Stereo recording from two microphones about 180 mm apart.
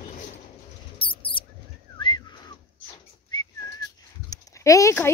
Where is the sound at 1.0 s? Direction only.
30° left (ahead or behind).